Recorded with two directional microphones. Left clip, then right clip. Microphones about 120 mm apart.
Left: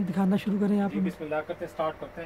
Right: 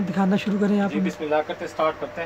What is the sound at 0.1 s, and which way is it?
Speech, 5° left (ahead or behind).